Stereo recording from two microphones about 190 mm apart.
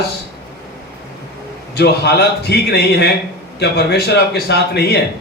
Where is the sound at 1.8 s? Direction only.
60° left (ahead or behind).